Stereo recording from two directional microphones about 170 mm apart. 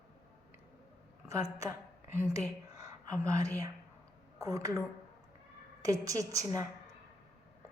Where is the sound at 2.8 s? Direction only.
20° right (ahead or behind).